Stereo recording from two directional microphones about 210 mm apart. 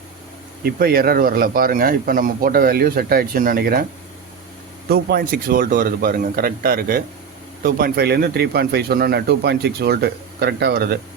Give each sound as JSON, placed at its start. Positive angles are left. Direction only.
{"t": 0.6, "sound": "speech", "side_deg": -45}
{"t": 4.9, "sound": "speech", "side_deg": -45}